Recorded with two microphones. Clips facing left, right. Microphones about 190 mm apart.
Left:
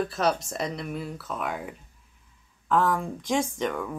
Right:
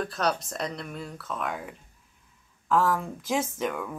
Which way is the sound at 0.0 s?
5° left (ahead or behind).